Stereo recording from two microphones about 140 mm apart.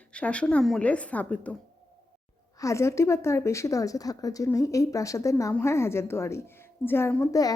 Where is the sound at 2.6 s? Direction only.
20° left (ahead or behind).